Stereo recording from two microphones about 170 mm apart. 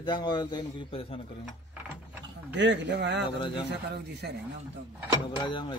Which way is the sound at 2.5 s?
90° right.